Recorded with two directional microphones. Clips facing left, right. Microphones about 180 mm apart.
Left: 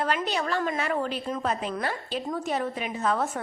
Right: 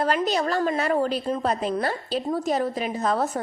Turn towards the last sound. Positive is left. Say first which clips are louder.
# right 3 dB
turn(degrees=-40)  # may be behind; listen again after turning